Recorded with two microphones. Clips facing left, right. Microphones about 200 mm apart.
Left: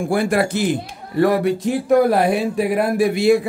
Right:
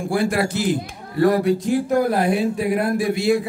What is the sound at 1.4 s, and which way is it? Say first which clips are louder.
Speech: even; 75° left (ahead or behind).